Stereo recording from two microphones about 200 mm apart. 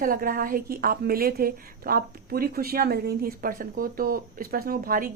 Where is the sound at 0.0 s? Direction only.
45° right (ahead or behind).